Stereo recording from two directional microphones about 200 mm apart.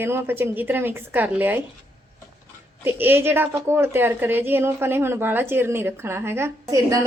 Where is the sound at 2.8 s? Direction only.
10° right (ahead or behind).